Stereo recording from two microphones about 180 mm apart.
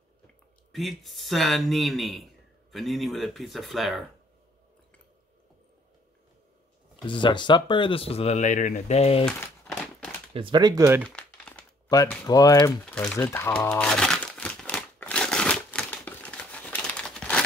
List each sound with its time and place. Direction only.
0.7 s speech: centre (ahead or behind)
7.0 s speech: 25° left (ahead or behind)
9.2 s crumpling: 10° left (ahead or behind)
10.3 s speech: 25° right (ahead or behind)
11.0 s crumpling: 5° left (ahead or behind)
11.9 s speech: 20° left (ahead or behind)
12.8 s speech: 5° left (ahead or behind)
13.7 s crumpling: 5° left (ahead or behind)